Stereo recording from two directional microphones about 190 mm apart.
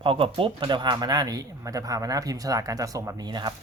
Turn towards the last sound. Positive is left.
turn(degrees=-25)  # may be behind; listen again after turning